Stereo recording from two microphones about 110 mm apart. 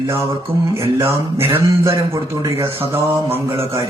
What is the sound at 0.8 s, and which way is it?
A man's voice, 25° right (ahead or behind).